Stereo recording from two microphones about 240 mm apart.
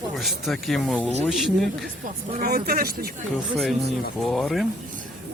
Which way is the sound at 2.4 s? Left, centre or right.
Right.